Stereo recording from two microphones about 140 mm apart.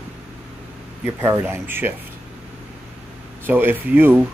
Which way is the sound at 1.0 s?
15° right (ahead or behind).